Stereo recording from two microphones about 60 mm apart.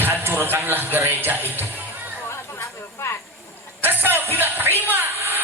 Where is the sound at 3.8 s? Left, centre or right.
Right.